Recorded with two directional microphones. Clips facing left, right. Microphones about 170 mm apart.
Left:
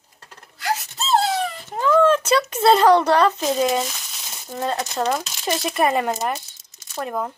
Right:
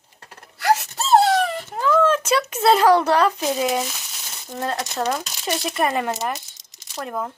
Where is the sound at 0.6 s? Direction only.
65° right (ahead or behind).